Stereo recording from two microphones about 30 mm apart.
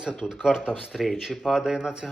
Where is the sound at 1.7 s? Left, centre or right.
Right.